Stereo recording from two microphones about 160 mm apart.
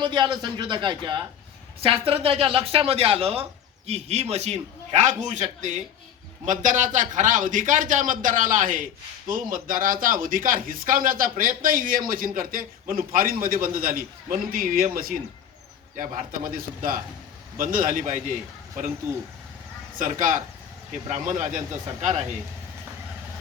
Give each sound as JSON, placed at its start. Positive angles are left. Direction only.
{"t": 0.0, "sound": "a man's voice", "side_deg": -30}
{"t": 20.0, "sound": "a man's voice", "side_deg": -55}